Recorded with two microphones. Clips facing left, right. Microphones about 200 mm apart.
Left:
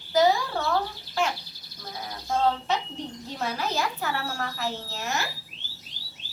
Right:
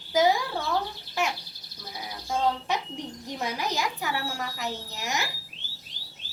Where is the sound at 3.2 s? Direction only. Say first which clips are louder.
Even; 15° right (ahead or behind).